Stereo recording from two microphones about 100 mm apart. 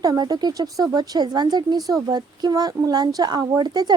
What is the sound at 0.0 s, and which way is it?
Speech, 40° right (ahead or behind).